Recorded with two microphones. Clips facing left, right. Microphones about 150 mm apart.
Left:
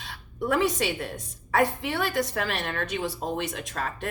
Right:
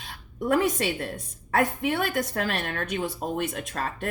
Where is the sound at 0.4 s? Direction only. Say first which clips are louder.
Right 1 dB; 55° right (ahead or behind).